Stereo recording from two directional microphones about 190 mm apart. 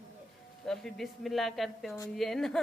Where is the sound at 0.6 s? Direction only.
Centre (ahead or behind).